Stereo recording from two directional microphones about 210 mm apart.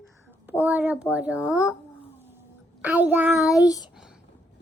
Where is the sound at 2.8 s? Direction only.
5° right (ahead or behind).